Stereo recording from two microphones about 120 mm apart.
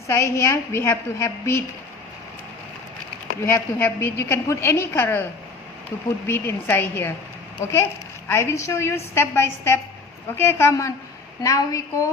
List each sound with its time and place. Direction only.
0.1 s a woman's voice: 25° left (ahead or behind)
3.4 s a woman's voice: 15° left (ahead or behind)
6.2 s a woman's voice: 20° left (ahead or behind)